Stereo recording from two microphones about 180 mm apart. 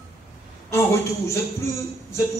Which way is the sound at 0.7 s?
15° left (ahead or behind).